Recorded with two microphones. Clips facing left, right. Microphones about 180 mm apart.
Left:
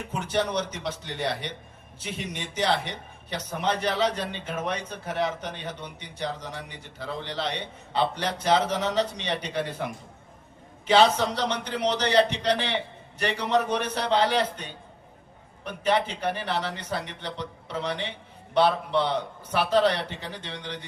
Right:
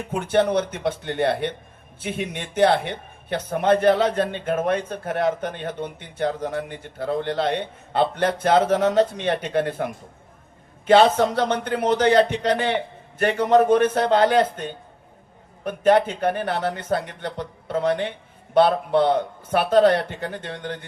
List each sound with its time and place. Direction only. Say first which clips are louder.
0.1 s speech: right 8 dB; 55° right (ahead or behind)